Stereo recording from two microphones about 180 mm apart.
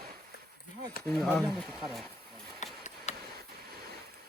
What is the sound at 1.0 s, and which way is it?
Speech, 5° left (ahead or behind).